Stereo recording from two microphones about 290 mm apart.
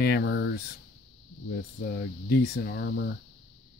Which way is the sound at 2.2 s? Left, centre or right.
Left.